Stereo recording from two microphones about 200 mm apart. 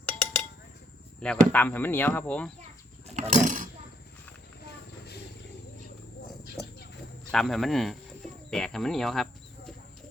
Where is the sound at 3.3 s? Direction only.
40° right (ahead or behind).